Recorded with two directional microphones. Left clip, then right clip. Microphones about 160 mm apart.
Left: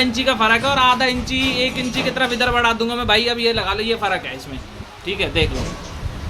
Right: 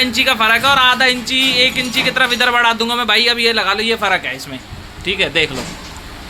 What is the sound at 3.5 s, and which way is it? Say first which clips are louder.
A man's voice: right 5 dB; 15° right (ahead or behind).